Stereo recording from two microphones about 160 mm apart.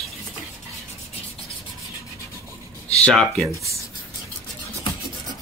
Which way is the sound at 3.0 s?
5° left (ahead or behind).